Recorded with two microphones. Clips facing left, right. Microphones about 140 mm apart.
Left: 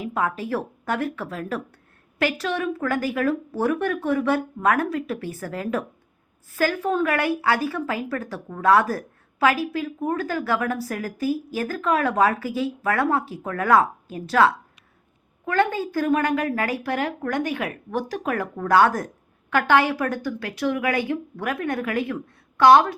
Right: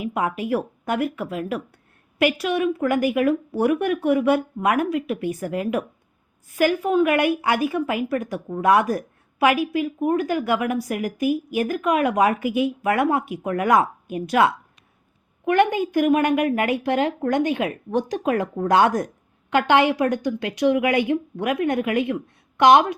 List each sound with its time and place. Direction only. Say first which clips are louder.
0.0 s a woman's voice: right 1 dB; 10° right (ahead or behind)